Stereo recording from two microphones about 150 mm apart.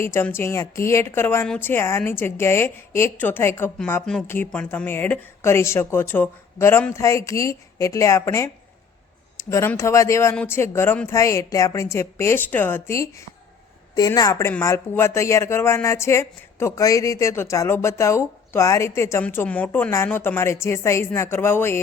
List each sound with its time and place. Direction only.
0.0 s a woman's voice: 15° left (ahead or behind)
9.5 s speech: 20° left (ahead or behind)